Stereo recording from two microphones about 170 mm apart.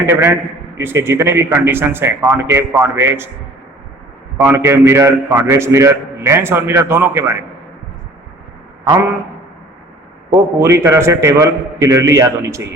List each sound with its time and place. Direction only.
0.1 s a man's voice: 15° right (ahead or behind)
4.4 s a man's voice: 15° right (ahead or behind)
8.9 s a man's voice: 20° right (ahead or behind)
10.3 s a man's voice: 15° right (ahead or behind)